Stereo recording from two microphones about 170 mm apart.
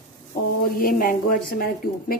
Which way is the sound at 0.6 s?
55° left (ahead or behind).